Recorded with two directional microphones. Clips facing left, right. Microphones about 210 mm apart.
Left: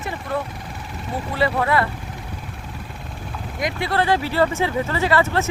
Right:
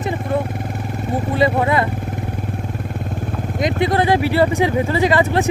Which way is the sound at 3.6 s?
20° right (ahead or behind).